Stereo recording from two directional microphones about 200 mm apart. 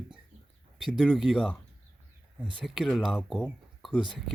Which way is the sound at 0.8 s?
Centre (ahead or behind).